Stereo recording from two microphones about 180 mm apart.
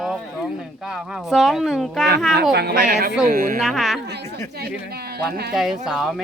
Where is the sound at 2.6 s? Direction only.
65° right (ahead or behind).